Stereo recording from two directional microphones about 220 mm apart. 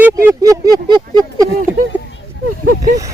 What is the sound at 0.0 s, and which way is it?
Speech, 10° right (ahead or behind).